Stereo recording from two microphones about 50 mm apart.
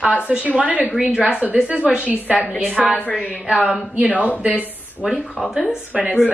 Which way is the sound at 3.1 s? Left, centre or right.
Centre.